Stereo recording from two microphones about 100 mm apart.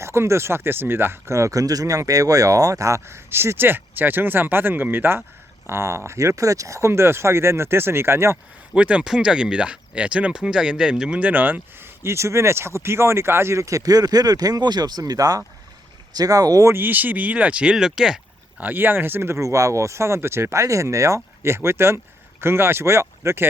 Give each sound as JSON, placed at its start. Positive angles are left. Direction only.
{"t": 0.0, "sound": "speech", "side_deg": -25}
{"t": 8.7, "sound": "speech", "side_deg": -10}
{"t": 18.6, "sound": "speech", "side_deg": -20}